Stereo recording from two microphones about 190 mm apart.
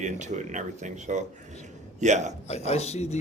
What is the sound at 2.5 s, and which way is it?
Speech, 35° left (ahead or behind).